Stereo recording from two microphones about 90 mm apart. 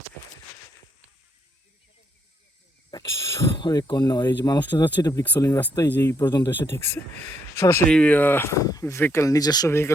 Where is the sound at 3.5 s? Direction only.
50° left (ahead or behind).